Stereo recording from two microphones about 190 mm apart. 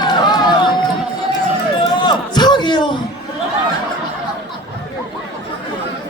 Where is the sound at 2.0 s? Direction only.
20° left (ahead or behind).